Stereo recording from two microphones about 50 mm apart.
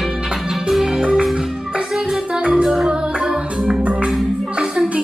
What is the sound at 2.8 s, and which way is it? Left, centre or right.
Music, centre.